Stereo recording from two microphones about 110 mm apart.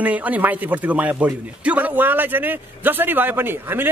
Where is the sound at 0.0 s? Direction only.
15° right (ahead or behind).